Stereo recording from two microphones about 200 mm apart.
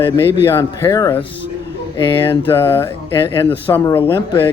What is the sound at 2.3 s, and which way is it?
Speech, 10° left (ahead or behind).